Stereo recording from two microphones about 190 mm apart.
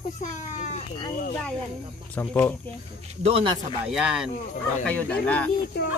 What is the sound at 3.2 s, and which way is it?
Speech, 30° right (ahead or behind).